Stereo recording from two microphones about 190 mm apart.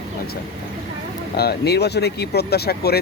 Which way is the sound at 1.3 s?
60° left (ahead or behind).